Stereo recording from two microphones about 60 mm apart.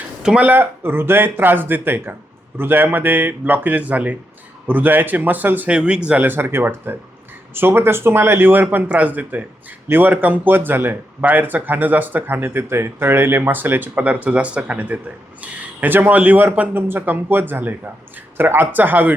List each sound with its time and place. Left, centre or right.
0.2 s speech: centre
0.4 s speech: right; by 6.2 s centre
6.2 s speech: right
14.0 s speech: right